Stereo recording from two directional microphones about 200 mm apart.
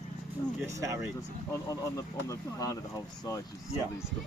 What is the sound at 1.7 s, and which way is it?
Speech, 15° left (ahead or behind).